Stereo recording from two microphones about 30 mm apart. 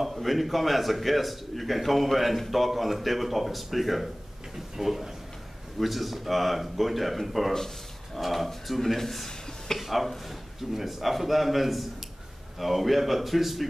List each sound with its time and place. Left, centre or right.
0.0 s a man's voice: centre